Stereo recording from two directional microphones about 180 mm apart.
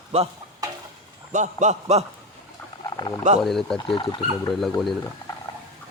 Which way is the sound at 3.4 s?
Centre (ahead or behind).